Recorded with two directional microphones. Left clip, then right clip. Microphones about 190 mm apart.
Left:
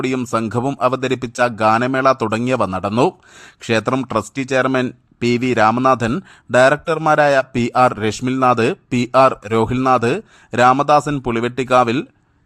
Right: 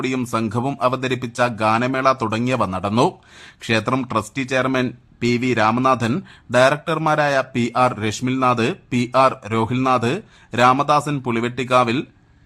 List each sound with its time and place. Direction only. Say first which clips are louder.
0.0 s speech: left 3 dB; 35° left (ahead or behind)